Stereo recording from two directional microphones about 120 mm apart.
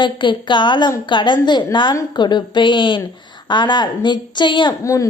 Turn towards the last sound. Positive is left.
turn(degrees=25)  # may be behind; listen again after turning